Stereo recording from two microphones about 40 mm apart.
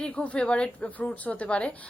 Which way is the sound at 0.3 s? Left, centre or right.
Left.